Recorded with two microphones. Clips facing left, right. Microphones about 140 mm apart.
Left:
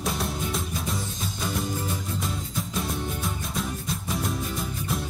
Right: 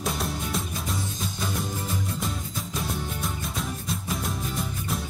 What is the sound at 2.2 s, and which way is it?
Music, centre (ahead or behind).